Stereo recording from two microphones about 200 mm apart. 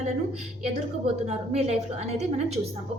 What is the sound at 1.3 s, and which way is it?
A woman's voice, 30° right (ahead or behind).